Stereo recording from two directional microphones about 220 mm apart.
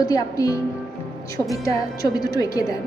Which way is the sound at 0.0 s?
15° left (ahead or behind).